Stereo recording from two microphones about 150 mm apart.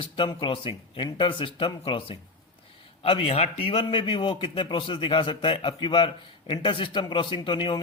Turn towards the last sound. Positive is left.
turn(degrees=35)  # may be behind; listen again after turning